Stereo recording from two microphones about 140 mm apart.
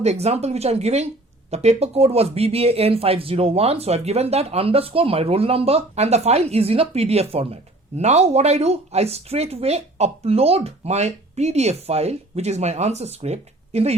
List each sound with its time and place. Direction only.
0.0 s speech: 50° right (ahead or behind)